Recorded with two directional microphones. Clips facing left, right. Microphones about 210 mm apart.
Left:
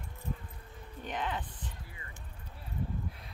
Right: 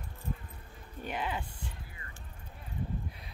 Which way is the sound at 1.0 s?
10° right (ahead or behind).